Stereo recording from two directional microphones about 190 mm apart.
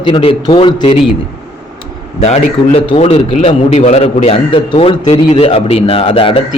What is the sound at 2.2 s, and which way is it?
A man's voice, 30° left (ahead or behind).